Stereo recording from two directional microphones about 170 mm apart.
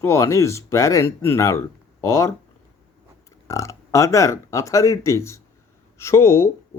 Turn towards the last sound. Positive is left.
turn(degrees=15)  # may be behind; listen again after turning